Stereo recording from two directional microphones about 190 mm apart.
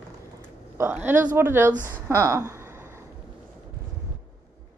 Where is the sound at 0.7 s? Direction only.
10° right (ahead or behind).